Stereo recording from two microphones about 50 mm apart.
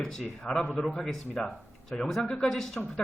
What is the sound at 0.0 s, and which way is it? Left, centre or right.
Speech, centre.